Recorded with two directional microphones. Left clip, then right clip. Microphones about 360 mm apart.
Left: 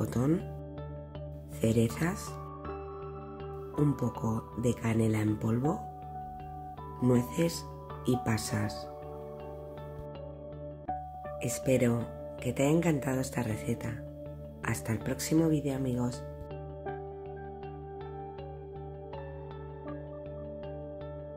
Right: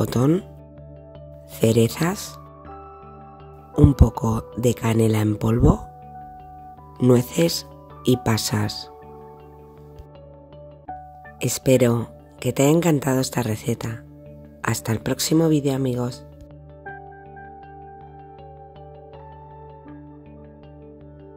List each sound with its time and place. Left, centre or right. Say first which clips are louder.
0.0 s speech: right 10 dB; right
1.6 s speech: right 11 dB; right
3.7 s speech: right 12 dB; right
7.0 s speech: right 11 dB; right
11.3 s speech: right 11 dB; right